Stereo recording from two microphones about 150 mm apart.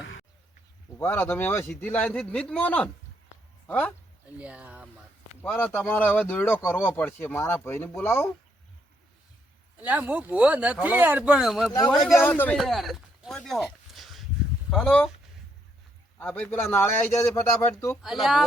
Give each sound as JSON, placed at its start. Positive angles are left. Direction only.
{"t": 0.9, "sound": "speech", "side_deg": 15}
{"t": 4.4, "sound": "speech", "side_deg": -10}
{"t": 5.4, "sound": "speech", "side_deg": 15}
{"t": 9.7, "sound": "speech", "side_deg": -10}
{"t": 12.1, "sound": "speech", "side_deg": 15}
{"t": 16.1, "sound": "speech", "side_deg": 10}
{"t": 18.0, "sound": "speech", "side_deg": 0}